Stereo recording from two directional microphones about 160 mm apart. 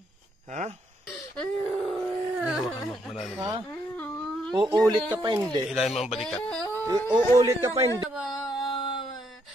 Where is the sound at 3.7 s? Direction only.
10° left (ahead or behind).